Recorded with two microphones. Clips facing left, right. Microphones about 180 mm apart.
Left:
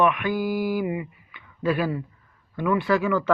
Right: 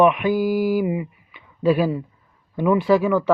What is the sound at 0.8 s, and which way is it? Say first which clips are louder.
Speech: right 4 dB; 5° right (ahead or behind).